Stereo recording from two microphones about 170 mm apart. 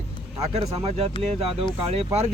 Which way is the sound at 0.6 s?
35° right (ahead or behind).